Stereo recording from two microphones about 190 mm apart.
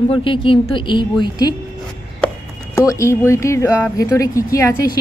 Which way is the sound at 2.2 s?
15° left (ahead or behind).